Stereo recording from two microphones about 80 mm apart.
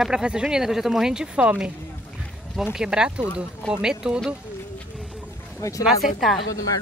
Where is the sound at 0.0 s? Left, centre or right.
Centre.